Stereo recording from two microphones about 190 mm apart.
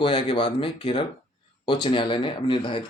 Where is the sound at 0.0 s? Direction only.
25° left (ahead or behind).